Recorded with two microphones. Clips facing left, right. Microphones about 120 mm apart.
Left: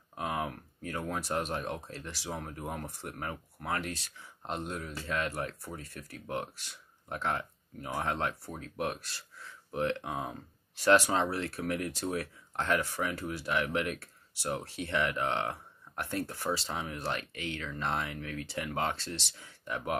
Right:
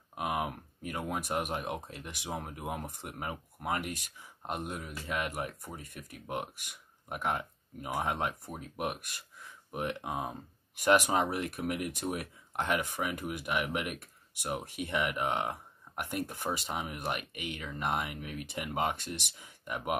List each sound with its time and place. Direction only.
0.1 s speech: 15° right (ahead or behind)